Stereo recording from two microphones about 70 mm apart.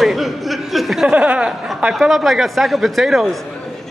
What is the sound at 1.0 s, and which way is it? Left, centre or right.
Speech, centre.